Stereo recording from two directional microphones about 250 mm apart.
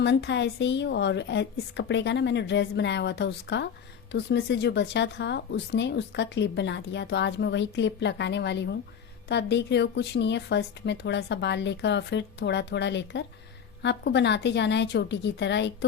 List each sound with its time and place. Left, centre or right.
0.0 s speech: left